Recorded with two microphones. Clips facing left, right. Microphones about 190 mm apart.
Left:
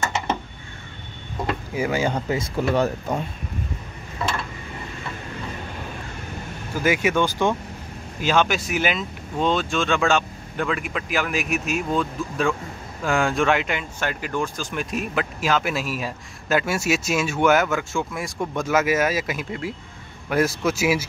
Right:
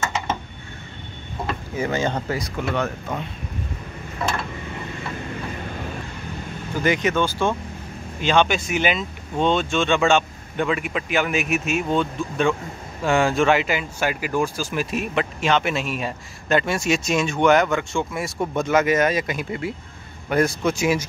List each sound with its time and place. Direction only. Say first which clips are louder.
1.8 s speech: even; 10° left (ahead or behind)
2.3 s speech: left 3 dB; 35° left (ahead or behind)
6.8 s speech: even; 10° left (ahead or behind)
8.2 s speech: right 1 dB; 5° left (ahead or behind)